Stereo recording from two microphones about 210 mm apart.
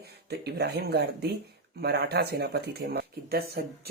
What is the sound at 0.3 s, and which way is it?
Speech, 50° right (ahead or behind).